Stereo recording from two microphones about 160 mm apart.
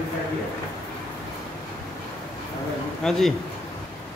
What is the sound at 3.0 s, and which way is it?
Speech, centre (ahead or behind).